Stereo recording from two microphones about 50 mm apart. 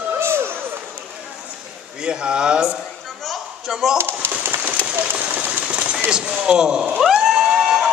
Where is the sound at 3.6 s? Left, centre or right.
Centre.